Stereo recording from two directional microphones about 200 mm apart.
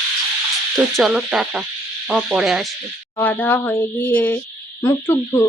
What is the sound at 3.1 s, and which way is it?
Speech, 10° left (ahead or behind).